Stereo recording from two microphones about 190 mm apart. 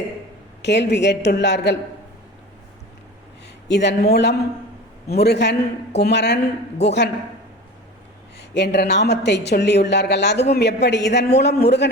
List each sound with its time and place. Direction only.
0.6 s a man's voice: 65° left (ahead or behind)
3.7 s a man's voice: 65° left (ahead or behind)
8.4 s a man's voice: 60° left (ahead or behind)